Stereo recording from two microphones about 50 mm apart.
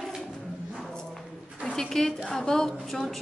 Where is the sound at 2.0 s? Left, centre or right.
Centre.